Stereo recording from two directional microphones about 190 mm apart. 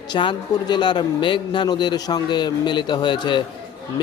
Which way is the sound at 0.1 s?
25° left (ahead or behind).